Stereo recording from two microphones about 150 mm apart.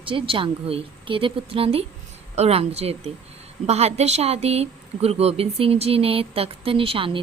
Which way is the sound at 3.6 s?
45° right (ahead or behind).